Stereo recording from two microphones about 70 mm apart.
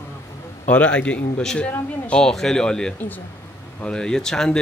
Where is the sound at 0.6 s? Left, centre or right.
Centre.